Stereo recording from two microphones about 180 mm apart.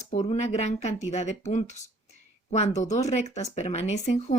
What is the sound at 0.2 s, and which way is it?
Speech, 35° left (ahead or behind).